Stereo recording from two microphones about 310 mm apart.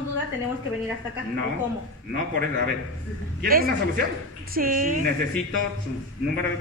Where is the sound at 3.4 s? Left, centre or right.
Right.